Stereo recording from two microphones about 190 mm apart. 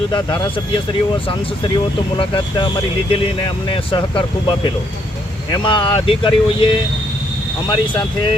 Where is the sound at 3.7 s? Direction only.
25° left (ahead or behind).